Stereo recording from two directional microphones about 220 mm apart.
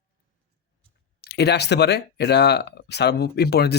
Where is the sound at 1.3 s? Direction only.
50° left (ahead or behind).